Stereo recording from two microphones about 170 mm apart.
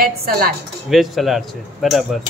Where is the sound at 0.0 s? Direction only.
60° right (ahead or behind).